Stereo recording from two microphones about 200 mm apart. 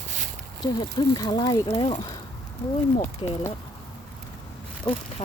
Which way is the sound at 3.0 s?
10° left (ahead or behind).